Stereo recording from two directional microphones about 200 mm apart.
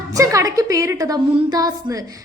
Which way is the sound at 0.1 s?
15° right (ahead or behind).